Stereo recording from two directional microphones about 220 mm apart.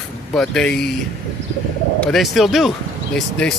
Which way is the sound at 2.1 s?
Centre (ahead or behind).